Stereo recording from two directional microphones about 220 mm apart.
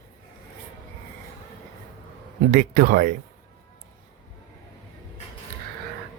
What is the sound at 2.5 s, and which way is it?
Speech, 40° right (ahead or behind).